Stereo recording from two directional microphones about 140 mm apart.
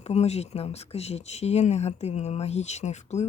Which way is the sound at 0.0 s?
50° left (ahead or behind).